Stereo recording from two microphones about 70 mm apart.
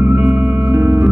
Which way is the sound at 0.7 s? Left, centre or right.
Right.